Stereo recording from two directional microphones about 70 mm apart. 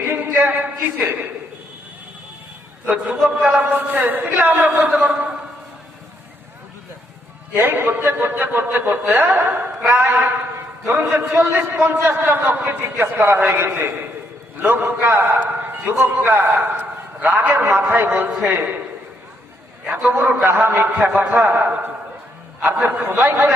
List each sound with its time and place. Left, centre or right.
0.0 s a sound: right
0.9 s speech: right
2.8 s a man's voice: centre
3.6 s speech: right
4.9 s a man's voice: centre
7.5 s a man's voice: right
19.9 s speech: right
22.6 s a man's voice: centre
23.2 s speech: right